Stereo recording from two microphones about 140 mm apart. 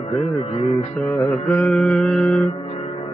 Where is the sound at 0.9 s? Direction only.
10° left (ahead or behind).